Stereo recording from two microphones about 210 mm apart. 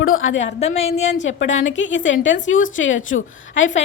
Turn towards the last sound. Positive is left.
turn(degrees=65)  # may be behind; listen again after turning